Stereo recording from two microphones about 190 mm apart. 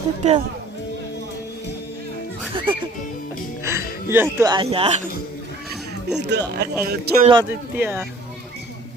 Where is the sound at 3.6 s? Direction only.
15° right (ahead or behind).